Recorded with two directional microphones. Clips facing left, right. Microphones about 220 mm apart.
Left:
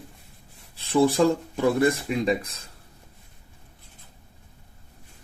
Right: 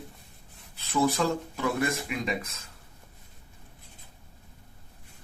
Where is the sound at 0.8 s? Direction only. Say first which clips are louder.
Left 6 dB; 30° left (ahead or behind).